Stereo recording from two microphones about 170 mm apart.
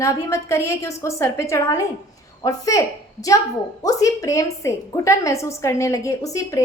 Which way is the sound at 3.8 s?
20° left (ahead or behind).